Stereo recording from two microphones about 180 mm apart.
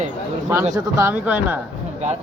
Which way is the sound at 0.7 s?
15° right (ahead or behind).